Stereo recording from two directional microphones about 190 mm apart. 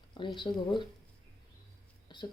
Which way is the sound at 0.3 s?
25° left (ahead or behind).